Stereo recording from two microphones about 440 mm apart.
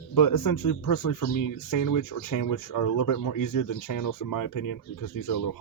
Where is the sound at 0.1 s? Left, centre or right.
Left.